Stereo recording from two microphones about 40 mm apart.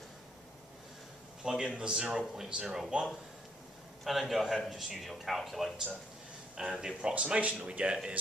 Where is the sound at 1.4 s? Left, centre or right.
Centre.